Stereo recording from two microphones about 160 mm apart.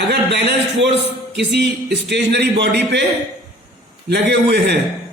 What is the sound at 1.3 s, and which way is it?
Speech, 90° right.